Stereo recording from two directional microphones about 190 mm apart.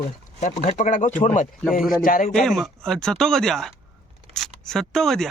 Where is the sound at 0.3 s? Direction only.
40° left (ahead or behind).